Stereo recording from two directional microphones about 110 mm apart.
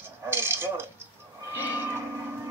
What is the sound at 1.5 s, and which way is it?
Train, 15° right (ahead or behind).